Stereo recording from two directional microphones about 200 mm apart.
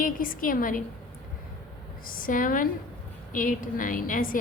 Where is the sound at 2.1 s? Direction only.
45° left (ahead or behind).